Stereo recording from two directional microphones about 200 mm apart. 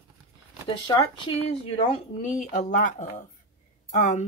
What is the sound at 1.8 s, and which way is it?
A woman's voice, 35° left (ahead or behind).